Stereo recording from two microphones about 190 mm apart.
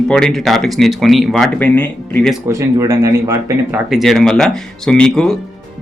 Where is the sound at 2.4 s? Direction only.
15° right (ahead or behind).